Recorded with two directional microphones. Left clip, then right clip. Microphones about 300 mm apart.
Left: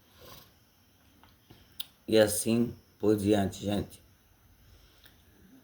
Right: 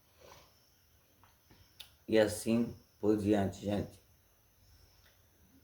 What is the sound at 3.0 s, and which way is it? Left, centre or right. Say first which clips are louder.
Speech: left 4 dB; left.